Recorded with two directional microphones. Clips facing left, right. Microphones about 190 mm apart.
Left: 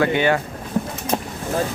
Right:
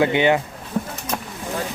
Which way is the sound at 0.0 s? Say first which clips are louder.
Right 1 dB; 20° right (ahead or behind).